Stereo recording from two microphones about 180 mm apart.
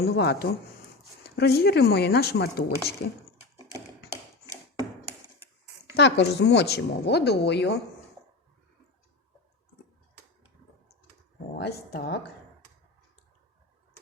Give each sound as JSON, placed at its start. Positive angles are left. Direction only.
{"t": 0.0, "sound": "speech", "side_deg": 60}
{"t": 6.0, "sound": "a woman's voice", "side_deg": 75}
{"t": 11.5, "sound": "speech", "side_deg": 65}